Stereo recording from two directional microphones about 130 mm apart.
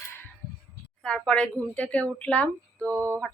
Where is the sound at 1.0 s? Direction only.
5° left (ahead or behind).